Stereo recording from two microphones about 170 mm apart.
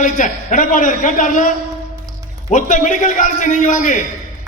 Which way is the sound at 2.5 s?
50° left (ahead or behind).